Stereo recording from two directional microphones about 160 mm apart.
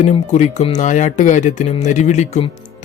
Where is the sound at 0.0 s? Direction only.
45° left (ahead or behind).